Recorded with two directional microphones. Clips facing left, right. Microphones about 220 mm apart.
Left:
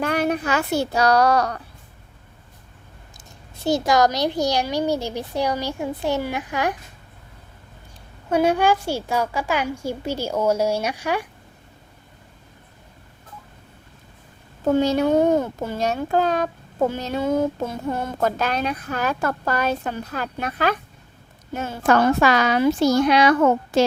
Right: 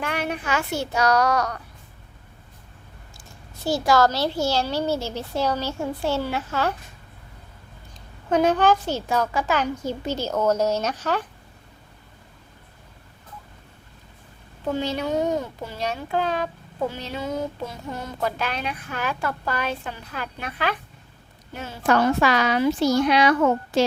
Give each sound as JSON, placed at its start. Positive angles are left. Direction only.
{"t": 0.0, "sound": "speech", "side_deg": 40}
{"t": 3.7, "sound": "a child's voice", "side_deg": 20}
{"t": 8.3, "sound": "a child's voice", "side_deg": 10}
{"t": 14.6, "sound": "a child's voice", "side_deg": 45}